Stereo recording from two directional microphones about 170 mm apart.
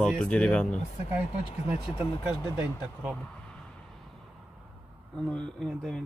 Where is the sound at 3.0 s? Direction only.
Centre (ahead or behind).